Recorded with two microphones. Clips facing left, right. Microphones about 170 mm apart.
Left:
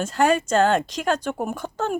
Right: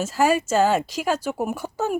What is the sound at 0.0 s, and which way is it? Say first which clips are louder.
Speech: even; 5° right (ahead or behind).